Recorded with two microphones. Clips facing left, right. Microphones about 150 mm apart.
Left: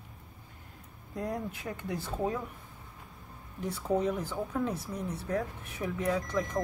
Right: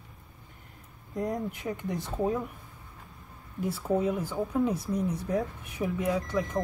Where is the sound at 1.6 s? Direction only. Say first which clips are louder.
Right 5 dB; 10° right (ahead or behind).